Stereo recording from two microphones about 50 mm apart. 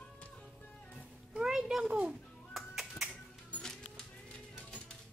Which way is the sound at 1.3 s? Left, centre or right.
Centre.